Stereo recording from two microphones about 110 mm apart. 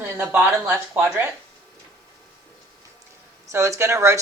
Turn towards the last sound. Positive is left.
turn(degrees=-25)  # may be behind; listen again after turning